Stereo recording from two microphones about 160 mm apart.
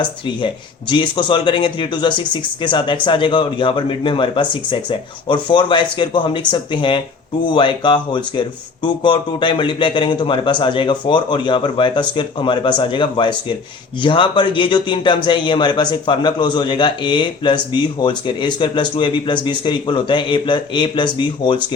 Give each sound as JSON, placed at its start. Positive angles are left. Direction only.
{"t": 0.0, "sound": "a man's voice", "side_deg": 30}